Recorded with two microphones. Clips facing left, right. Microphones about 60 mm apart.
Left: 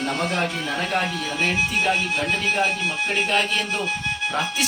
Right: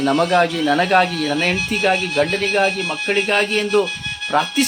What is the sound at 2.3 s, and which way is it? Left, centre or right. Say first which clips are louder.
Speech: right 5 dB; right.